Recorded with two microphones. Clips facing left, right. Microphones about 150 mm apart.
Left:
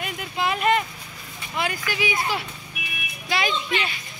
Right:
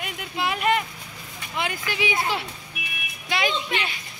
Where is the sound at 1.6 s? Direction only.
20° right (ahead or behind).